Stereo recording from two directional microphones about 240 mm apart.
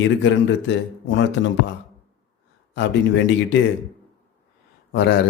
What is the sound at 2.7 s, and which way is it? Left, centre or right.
Speech, left.